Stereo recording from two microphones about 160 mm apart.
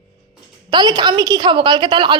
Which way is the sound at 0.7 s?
25° right (ahead or behind).